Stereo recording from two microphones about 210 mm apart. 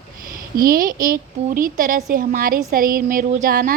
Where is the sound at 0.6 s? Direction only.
45° right (ahead or behind).